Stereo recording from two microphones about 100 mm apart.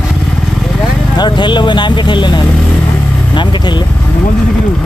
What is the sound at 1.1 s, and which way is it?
Speech, 50° left (ahead or behind).